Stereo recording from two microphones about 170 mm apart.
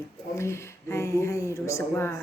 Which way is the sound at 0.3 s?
15° left (ahead or behind).